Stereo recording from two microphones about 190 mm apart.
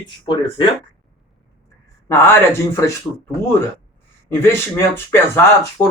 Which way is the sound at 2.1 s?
15° left (ahead or behind).